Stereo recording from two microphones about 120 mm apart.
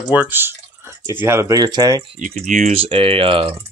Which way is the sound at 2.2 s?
90° right.